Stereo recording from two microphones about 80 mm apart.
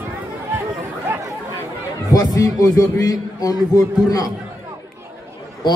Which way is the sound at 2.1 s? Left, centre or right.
Left.